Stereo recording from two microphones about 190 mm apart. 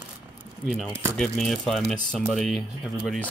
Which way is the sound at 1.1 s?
5° left (ahead or behind).